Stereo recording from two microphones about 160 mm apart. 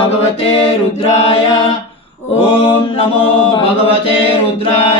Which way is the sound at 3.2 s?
30° left (ahead or behind).